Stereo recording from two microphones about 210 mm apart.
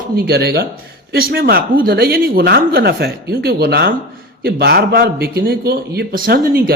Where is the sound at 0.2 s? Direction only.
45° right (ahead or behind).